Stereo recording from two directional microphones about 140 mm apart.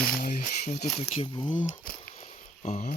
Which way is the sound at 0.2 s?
80° left.